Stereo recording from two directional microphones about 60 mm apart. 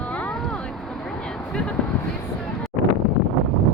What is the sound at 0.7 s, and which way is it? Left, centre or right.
Vehicle, centre.